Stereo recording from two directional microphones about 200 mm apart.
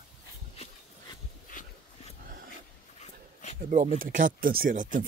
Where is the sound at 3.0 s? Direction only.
35° left (ahead or behind).